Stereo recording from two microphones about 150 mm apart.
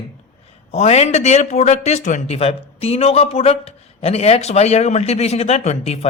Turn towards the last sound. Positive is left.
turn(degrees=40)  # may be behind; listen again after turning